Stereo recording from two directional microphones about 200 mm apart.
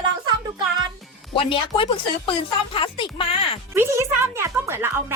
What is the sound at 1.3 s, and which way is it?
Speech, 25° left (ahead or behind).